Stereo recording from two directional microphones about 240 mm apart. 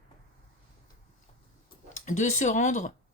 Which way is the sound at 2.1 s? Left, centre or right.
Left.